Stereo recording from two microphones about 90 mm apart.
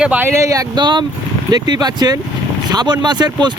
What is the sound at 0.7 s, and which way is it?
Speech, 55° right (ahead or behind).